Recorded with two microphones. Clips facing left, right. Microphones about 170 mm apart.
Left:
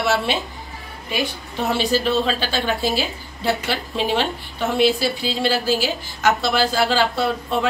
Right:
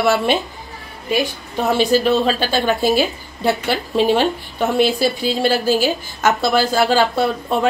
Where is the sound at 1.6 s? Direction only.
40° right (ahead or behind).